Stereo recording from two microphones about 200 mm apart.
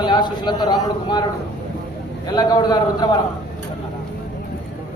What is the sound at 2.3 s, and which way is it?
Speech, 20° left (ahead or behind).